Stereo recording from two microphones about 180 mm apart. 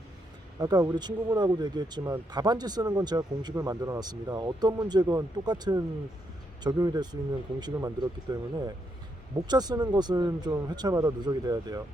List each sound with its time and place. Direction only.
0.6 s speech: 20° right (ahead or behind)